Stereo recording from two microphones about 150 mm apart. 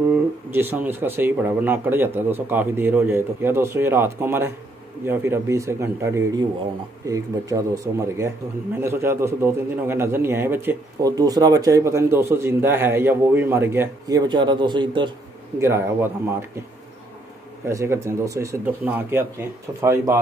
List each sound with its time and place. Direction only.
0.1 s a man's voice: 15° right (ahead or behind); by 15.0 s 30° right (ahead or behind)
15.6 s a man's voice: 15° right (ahead or behind)
17.6 s speech: 20° right (ahead or behind)